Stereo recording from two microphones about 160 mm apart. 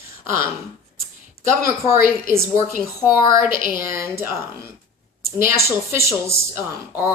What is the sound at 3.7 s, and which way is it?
A woman's voice, 15° right (ahead or behind).